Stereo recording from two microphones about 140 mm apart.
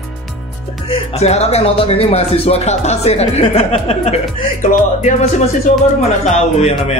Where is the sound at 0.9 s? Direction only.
50° left (ahead or behind).